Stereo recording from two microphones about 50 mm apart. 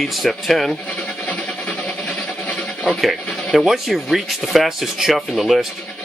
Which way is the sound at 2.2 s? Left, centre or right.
Left.